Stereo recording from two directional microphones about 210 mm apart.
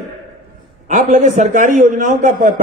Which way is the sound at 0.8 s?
35° right (ahead or behind).